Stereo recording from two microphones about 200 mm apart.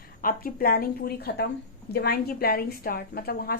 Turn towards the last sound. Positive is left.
turn(degrees=50)  # may be behind; listen again after turning